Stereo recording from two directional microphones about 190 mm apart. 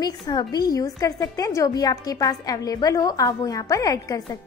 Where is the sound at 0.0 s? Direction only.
20° left (ahead or behind).